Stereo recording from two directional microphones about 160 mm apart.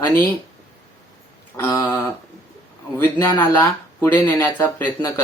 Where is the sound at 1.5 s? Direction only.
15° left (ahead or behind).